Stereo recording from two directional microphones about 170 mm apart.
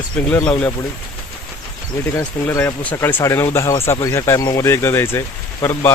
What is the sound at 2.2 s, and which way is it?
Speech, 15° left (ahead or behind).